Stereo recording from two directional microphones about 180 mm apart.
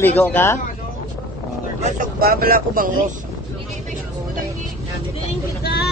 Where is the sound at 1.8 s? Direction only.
50° right (ahead or behind).